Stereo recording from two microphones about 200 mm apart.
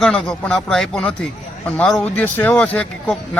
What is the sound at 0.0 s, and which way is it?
A man's voice, centre (ahead or behind).